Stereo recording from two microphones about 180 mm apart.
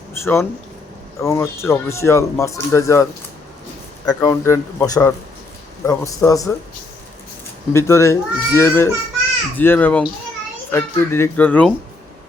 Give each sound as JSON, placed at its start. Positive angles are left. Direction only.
{"t": 0.2, "sound": "speech", "side_deg": 15}
{"t": 7.7, "sound": "speech", "side_deg": 15}